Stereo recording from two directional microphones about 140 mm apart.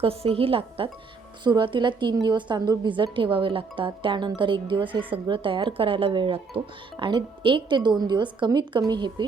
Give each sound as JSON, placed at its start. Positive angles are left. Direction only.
{"t": 0.0, "sound": "a woman's voice", "side_deg": -45}